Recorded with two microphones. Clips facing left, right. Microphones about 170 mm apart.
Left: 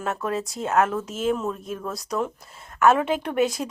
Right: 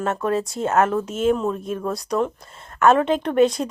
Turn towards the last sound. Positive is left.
turn(degrees=5)  # may be behind; listen again after turning